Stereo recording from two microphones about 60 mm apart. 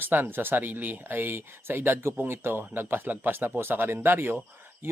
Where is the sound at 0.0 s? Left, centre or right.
Right.